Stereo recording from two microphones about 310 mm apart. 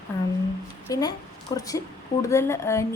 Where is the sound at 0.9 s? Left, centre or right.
Centre.